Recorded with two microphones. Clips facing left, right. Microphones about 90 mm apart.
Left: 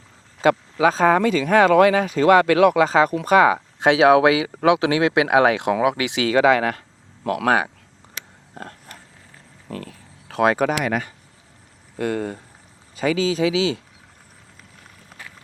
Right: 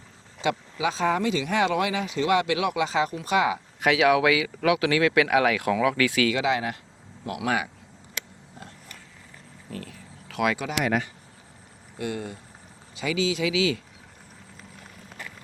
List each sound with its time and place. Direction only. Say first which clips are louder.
0.4 s speech: left 9 dB; 45° left (ahead or behind)
3.8 s speech: left 6 dB; 30° left (ahead or behind)
6.3 s speech: left 9 dB; 50° left (ahead or behind)
9.6 s a sound: left 5 dB; 45° left (ahead or behind)
10.6 s speech: left 5 dB; 45° left (ahead or behind)
13.0 s speech: left 6 dB; 40° left (ahead or behind)